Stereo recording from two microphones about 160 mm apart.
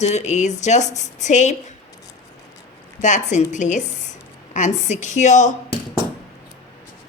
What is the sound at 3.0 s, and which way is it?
A woman's voice, 50° left (ahead or behind).